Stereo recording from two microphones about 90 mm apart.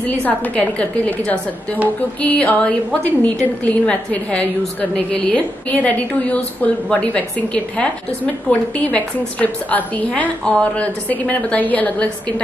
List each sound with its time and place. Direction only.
0.2 s a woman's voice: 15° left (ahead or behind)